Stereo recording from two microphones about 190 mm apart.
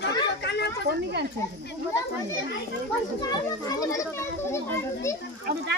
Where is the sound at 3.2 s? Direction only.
20° left (ahead or behind).